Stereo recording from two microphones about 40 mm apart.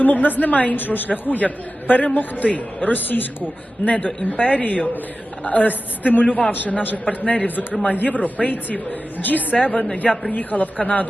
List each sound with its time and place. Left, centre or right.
0.0 s a woman's voice: left
3.8 s a man's voice: left
9.6 s a man's voice: left
10.3 s a man's voice: left